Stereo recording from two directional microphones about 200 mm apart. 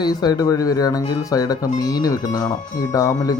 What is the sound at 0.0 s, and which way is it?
Speech, 20° left (ahead or behind).